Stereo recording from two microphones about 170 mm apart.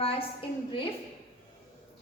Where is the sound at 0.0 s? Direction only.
35° left (ahead or behind).